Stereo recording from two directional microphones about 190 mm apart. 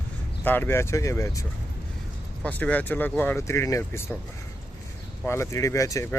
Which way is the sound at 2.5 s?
10° left (ahead or behind).